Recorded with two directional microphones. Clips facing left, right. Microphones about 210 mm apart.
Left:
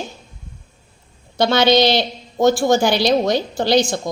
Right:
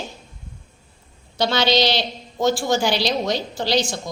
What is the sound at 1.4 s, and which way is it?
A woman's voice, 50° left (ahead or behind).